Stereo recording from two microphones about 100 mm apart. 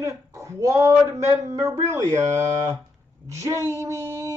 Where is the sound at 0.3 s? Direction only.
35° right (ahead or behind).